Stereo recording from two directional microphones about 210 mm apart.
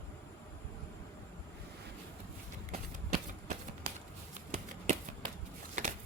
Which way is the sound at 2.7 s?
35° right (ahead or behind).